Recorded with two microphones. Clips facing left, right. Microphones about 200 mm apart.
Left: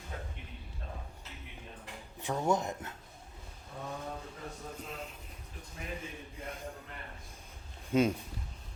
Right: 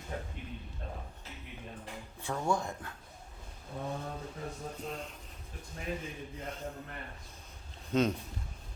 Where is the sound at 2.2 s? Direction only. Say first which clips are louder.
Left 2 dB; 20° left (ahead or behind).